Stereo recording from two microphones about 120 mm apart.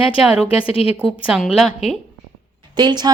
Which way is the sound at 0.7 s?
50° left (ahead or behind).